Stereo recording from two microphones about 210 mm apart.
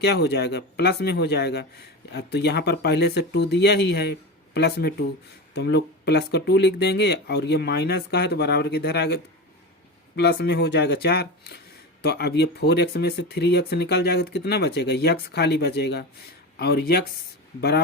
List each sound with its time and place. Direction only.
0.0 s speech: 50° left (ahead or behind)